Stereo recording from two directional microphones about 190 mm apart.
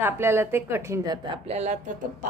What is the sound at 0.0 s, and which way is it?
A woman's voice, 10° right (ahead or behind).